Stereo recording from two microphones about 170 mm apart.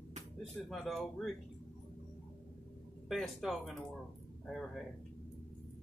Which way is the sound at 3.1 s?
Centre (ahead or behind).